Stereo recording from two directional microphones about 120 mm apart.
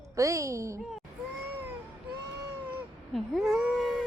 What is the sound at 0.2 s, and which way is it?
Speech, 25° right (ahead or behind).